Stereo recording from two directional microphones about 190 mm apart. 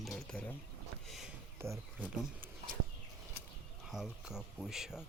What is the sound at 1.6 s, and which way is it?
Speech, 10° right (ahead or behind).